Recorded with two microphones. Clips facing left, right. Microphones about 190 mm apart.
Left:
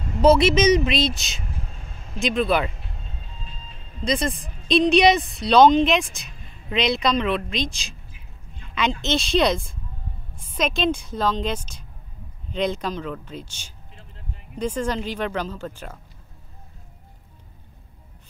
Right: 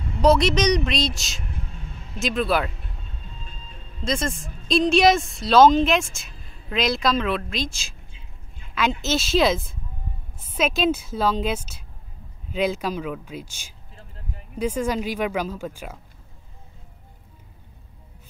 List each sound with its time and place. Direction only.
0.2 s speech: centre (ahead or behind)
3.4 s music: 45° right (ahead or behind)
4.0 s speech: centre (ahead or behind)
9.0 s speech: 5° right (ahead or behind)